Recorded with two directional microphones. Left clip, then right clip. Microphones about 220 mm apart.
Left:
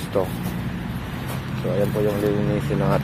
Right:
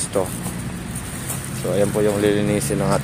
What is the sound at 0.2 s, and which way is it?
Speech, 10° right (ahead or behind).